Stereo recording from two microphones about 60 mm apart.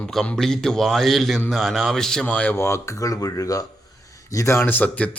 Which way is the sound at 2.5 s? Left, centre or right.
Left.